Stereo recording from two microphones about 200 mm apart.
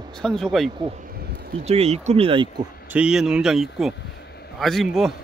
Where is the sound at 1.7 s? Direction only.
30° right (ahead or behind).